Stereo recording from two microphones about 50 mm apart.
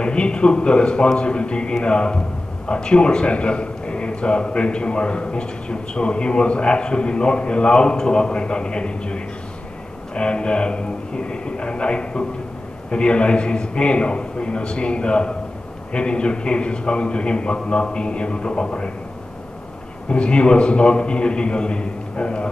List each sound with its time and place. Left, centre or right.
0.0 s a man's voice: centre
20.1 s a man's voice: left